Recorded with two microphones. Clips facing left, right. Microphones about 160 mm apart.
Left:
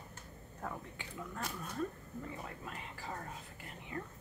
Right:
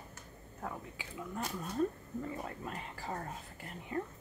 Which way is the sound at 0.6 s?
5° right (ahead or behind).